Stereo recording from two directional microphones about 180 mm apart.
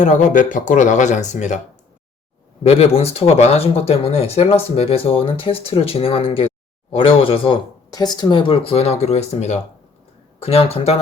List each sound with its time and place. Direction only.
0.0 s speech: 45° left (ahead or behind)
2.6 s speech: 35° left (ahead or behind)